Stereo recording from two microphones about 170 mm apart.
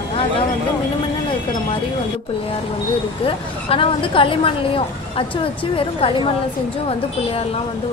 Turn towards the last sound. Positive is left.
turn(degrees=30)  # may be behind; listen again after turning